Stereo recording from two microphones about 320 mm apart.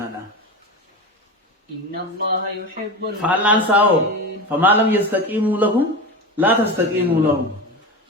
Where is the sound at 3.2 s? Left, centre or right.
Centre.